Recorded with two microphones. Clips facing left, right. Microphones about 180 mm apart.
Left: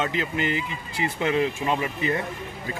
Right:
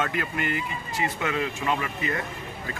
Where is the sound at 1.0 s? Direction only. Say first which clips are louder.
Left 4 dB; 30° left (ahead or behind).